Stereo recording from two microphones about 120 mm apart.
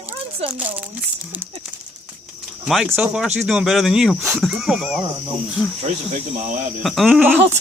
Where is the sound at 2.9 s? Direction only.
15° right (ahead or behind).